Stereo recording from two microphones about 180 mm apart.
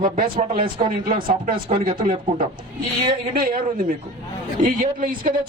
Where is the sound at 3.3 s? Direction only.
55° right (ahead or behind).